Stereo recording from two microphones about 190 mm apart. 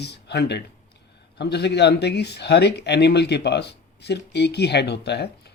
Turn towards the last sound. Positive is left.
turn(degrees=60)  # may be behind; listen again after turning